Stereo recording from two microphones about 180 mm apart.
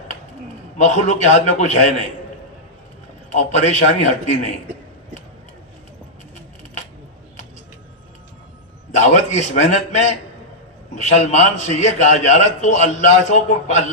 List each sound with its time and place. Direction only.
0.8 s a man's voice: 40° left (ahead or behind)
3.2 s a man's voice: 40° left (ahead or behind)
9.0 s a man's voice: 40° left (ahead or behind)